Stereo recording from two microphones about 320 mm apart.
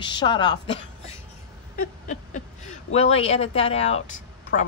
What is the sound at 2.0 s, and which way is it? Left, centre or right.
A woman's voice, left.